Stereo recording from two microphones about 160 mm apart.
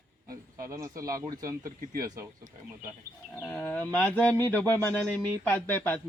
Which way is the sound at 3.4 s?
15° left (ahead or behind).